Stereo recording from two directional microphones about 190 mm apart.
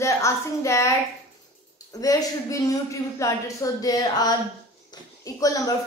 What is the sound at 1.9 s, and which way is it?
Speech, 20° left (ahead or behind).